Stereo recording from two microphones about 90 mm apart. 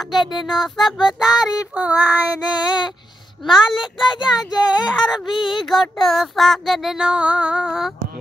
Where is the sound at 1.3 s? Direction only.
45° left (ahead or behind).